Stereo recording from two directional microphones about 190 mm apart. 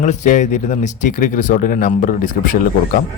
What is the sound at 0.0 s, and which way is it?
Speech, 40° left (ahead or behind).